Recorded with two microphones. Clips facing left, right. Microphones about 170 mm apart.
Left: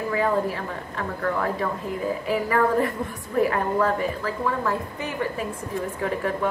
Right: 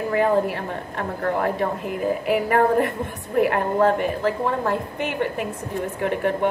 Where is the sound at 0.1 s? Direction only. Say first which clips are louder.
Right 4 dB; 60° right (ahead or behind).